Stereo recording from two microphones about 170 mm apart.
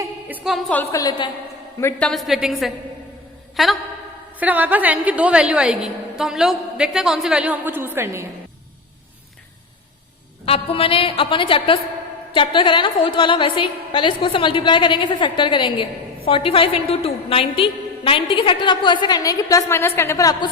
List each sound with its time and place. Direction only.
0.0 s a sound: 10° right (ahead or behind)
0.7 s a woman's voice: 10° left (ahead or behind)
1.8 s a woman's voice: 5° left (ahead or behind); by 8.3 s 15° right (ahead or behind)
10.4 s a woman's voice: 35° left (ahead or behind)